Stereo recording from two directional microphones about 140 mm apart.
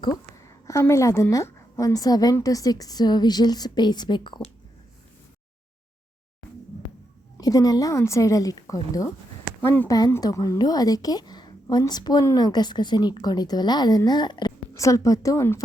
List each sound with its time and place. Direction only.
0.0 s speech: 25° left (ahead or behind)
7.3 s speech: 25° left (ahead or behind)
9.6 s speech: 15° left (ahead or behind)